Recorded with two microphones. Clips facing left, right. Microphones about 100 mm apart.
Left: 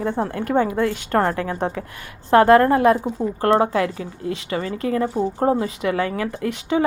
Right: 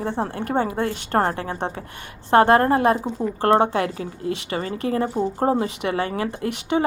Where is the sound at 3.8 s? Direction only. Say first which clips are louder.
Left 1 dB; 50° right (ahead or behind).